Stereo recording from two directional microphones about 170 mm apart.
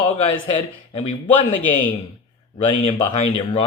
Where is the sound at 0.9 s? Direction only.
30° left (ahead or behind).